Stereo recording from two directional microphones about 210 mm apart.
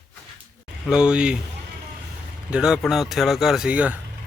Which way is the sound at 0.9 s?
5° right (ahead or behind).